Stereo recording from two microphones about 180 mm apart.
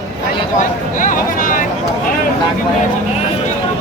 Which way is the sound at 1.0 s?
50° left (ahead or behind).